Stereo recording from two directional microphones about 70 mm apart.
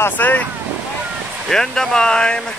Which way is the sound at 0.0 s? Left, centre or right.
Left.